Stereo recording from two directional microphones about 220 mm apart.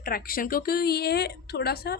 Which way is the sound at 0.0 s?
40° left (ahead or behind).